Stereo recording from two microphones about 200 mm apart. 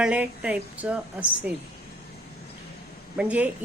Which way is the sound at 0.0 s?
5° right (ahead or behind).